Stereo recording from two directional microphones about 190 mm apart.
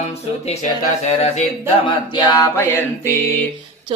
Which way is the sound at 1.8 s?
20° left (ahead or behind).